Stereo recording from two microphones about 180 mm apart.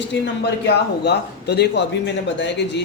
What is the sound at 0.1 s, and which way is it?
Speech, 70° left (ahead or behind).